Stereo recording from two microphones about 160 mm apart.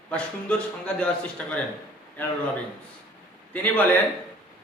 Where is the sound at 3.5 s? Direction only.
10° left (ahead or behind).